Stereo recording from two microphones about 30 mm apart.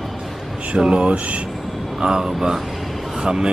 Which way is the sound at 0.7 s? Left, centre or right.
Right.